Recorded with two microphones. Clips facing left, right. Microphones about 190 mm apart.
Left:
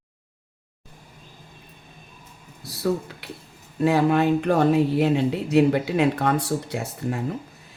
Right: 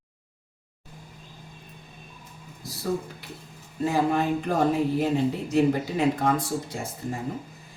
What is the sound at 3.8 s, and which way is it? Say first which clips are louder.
Speech: left 4 dB; 70° left (ahead or behind).